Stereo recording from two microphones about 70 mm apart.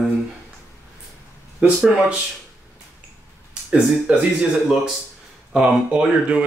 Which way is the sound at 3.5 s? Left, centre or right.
Centre.